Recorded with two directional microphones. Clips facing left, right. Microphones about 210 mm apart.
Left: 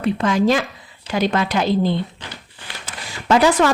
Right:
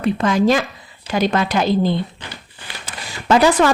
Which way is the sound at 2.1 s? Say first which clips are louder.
Right 1 dB; 5° right (ahead or behind).